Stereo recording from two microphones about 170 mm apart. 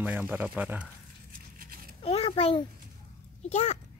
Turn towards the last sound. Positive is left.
turn(degrees=45)  # may be behind; listen again after turning